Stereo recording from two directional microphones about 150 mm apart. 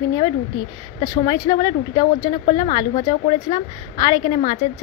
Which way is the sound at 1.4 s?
30° left (ahead or behind).